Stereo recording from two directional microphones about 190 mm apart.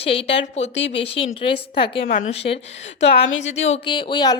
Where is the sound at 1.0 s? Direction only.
30° left (ahead or behind).